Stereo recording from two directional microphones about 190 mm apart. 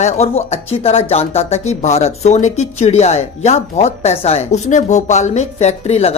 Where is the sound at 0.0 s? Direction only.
35° left (ahead or behind).